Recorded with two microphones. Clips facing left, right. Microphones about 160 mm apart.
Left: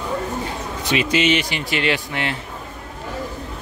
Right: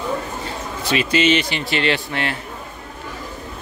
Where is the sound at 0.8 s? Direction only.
15° left (ahead or behind).